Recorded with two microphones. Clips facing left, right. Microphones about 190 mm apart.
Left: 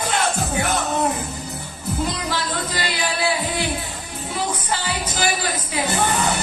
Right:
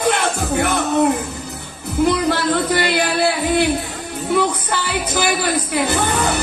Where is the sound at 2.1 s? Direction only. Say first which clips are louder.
Right 8 dB; 60° right (ahead or behind).